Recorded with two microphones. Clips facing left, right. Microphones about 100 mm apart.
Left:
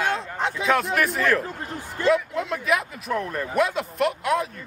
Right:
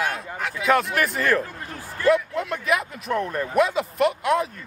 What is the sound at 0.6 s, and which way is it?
Speech, centre (ahead or behind).